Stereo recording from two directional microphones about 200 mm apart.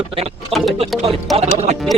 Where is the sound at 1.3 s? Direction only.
30° right (ahead or behind).